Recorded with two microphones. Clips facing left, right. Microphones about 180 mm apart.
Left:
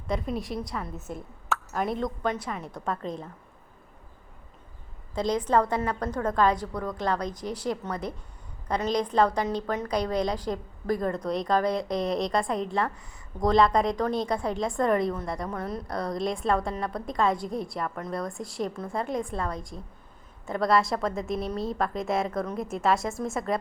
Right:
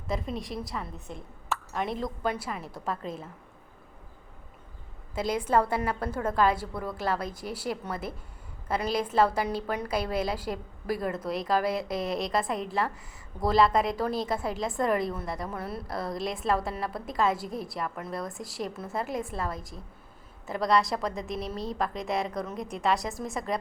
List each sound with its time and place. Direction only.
0.1 s a woman's voice: centre (ahead or behind)
5.1 s a woman's voice: 5° right (ahead or behind)